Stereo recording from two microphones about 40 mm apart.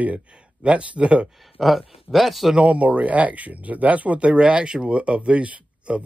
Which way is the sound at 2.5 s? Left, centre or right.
Right.